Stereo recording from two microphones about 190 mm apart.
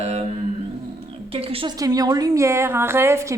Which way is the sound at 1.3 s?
30° right (ahead or behind).